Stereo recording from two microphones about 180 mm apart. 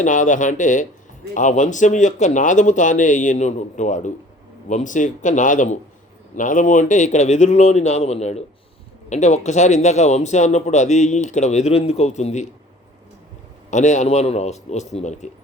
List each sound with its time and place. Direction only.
0.0 s a man's voice: 45° left (ahead or behind)
13.7 s speech: 40° left (ahead or behind)